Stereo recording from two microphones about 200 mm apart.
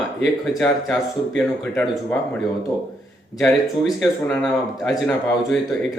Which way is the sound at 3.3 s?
Centre (ahead or behind).